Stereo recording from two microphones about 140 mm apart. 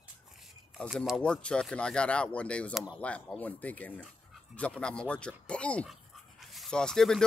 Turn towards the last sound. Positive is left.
turn(degrees=5)  # may be behind; listen again after turning